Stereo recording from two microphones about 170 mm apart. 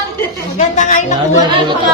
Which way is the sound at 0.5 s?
45° left (ahead or behind).